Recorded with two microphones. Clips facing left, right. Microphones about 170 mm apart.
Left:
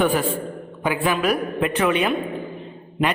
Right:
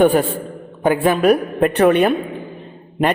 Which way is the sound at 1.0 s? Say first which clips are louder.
Right 6 dB; 35° right (ahead or behind).